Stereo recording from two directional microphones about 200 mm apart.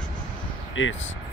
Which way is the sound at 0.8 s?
75° left (ahead or behind).